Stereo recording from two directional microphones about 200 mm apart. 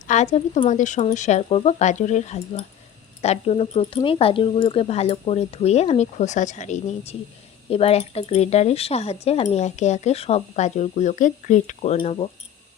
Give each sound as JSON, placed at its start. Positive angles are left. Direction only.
{"t": 0.1, "sound": "speech", "side_deg": 35}